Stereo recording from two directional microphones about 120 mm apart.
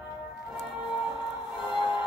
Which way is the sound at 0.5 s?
5° right (ahead or behind).